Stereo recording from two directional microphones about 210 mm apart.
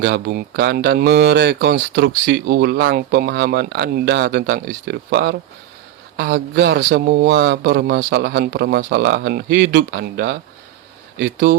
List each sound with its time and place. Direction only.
0.0 s speech: 50° right (ahead or behind)